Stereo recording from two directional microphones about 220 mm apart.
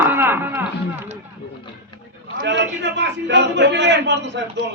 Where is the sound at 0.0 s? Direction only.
10° right (ahead or behind).